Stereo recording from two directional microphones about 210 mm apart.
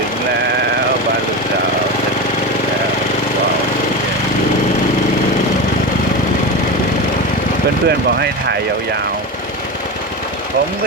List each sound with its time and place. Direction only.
7.9 s speech: 50° right (ahead or behind)